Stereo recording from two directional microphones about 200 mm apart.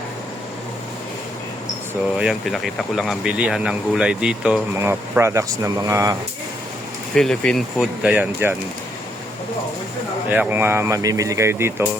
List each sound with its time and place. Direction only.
2.1 s speech: centre (ahead or behind)
7.1 s speech: 5° left (ahead or behind)
10.2 s speech: 10° right (ahead or behind)